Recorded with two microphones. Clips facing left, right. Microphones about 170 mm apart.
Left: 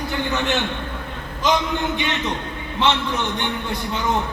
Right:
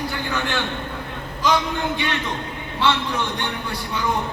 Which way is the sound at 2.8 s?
20° left (ahead or behind).